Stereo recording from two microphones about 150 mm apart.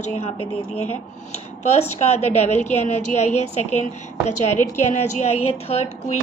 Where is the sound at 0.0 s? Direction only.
45° left (ahead or behind).